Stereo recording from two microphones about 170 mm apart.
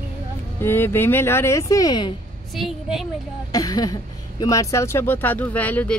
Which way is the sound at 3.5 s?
20° left (ahead or behind).